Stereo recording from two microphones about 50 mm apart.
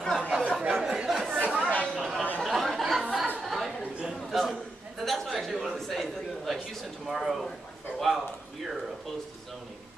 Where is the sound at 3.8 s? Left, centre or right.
Right.